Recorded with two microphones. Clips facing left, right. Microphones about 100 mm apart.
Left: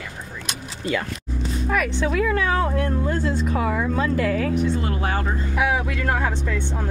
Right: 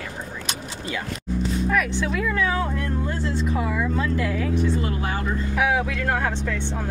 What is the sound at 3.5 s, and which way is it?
Speech, 55° left (ahead or behind).